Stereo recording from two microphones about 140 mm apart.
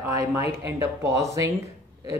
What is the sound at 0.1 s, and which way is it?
Speech, 20° right (ahead or behind).